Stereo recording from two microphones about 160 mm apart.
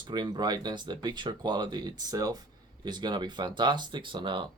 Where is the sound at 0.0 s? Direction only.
25° right (ahead or behind).